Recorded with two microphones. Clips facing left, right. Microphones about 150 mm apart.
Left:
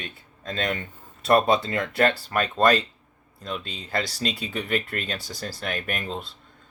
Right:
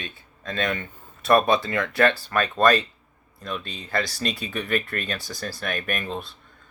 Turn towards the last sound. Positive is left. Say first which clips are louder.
# right 1 dB
turn(degrees=25)  # may be behind; listen again after turning